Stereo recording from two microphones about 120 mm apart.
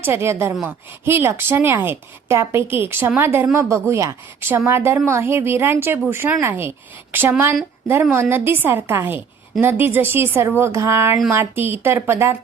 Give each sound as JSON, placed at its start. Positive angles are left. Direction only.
{"t": 0.0, "sound": "a woman's voice", "side_deg": -20}